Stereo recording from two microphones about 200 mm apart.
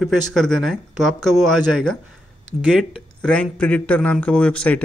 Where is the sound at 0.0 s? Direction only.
Centre (ahead or behind).